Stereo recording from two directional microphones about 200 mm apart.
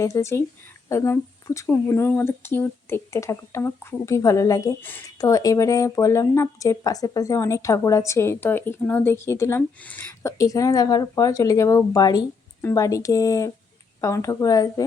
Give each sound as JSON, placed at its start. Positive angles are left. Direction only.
{"t": 0.0, "sound": "speech", "side_deg": 15}